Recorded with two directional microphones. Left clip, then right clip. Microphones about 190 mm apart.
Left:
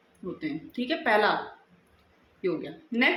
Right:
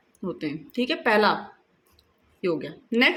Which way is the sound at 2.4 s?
55° right (ahead or behind).